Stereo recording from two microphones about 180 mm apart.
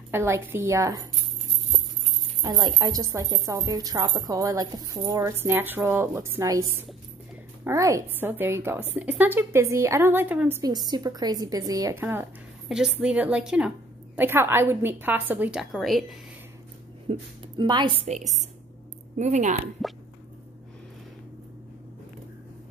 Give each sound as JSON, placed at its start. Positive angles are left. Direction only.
{"t": 0.1, "sound": "a woman's voice", "side_deg": -15}
{"t": 2.4, "sound": "a woman's voice", "side_deg": -20}
{"t": 17.1, "sound": "speech", "side_deg": -25}